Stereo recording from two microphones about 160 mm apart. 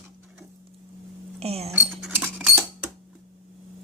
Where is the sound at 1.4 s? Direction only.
40° right (ahead or behind).